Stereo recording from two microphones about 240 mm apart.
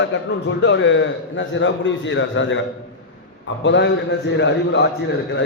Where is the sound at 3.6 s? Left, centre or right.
Left.